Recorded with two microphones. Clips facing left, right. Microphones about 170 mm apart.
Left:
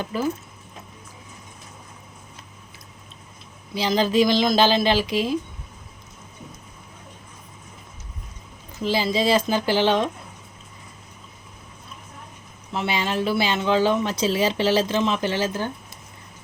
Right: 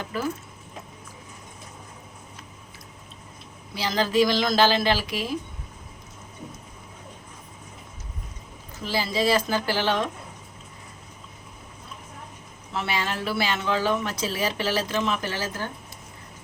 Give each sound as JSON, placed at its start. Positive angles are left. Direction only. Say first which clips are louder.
{"t": 0.0, "sound": "speech", "louder": "left 4 dB", "side_deg": 20}
{"t": 3.8, "sound": "speech", "louder": "left 3 dB", "side_deg": 20}
{"t": 8.8, "sound": "a woman's voice", "louder": "left 3 dB", "side_deg": 20}
{"t": 12.7, "sound": "speech", "louder": "left 4 dB", "side_deg": 20}